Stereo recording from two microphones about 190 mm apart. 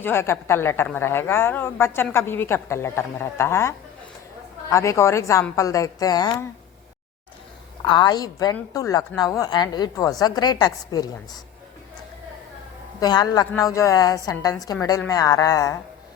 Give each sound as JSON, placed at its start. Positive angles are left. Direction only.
{"t": 0.0, "sound": "speech", "side_deg": 10}
{"t": 7.8, "sound": "a woman's voice", "side_deg": 20}
{"t": 13.0, "sound": "a woman's voice", "side_deg": 20}